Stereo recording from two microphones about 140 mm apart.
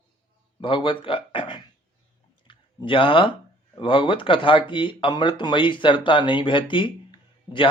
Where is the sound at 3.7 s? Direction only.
40° left (ahead or behind).